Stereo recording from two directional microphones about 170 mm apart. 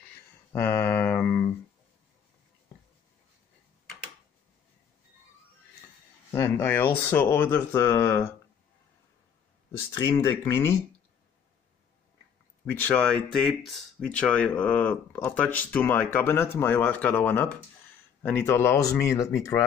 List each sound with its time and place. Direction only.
0.5 s mantra: 15° left (ahead or behind)
6.3 s speech: 15° left (ahead or behind)
9.7 s speech: 15° left (ahead or behind)
12.6 s speech: 10° left (ahead or behind)